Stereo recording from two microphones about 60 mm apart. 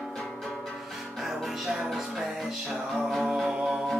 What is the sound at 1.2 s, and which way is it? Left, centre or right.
Music, centre.